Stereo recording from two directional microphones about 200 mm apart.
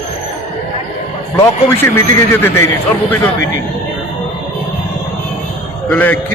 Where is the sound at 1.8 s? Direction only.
10° left (ahead or behind).